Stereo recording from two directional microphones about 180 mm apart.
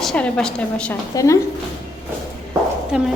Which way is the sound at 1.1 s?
20° left (ahead or behind).